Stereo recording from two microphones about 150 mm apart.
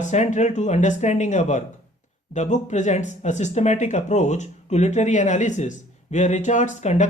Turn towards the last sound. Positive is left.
turn(degrees=50)  # may be behind; listen again after turning